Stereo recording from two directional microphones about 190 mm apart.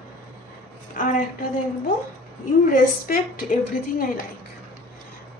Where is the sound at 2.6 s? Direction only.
50° left (ahead or behind).